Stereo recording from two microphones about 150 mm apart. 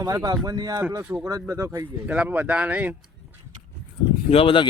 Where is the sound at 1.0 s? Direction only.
10° right (ahead or behind).